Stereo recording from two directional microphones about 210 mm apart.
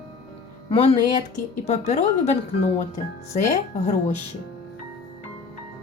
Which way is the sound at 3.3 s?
35° left (ahead or behind).